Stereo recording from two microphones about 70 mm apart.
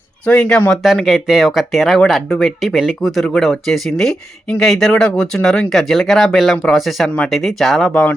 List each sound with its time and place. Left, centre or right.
0.3 s speech: centre
0.7 s speech: centre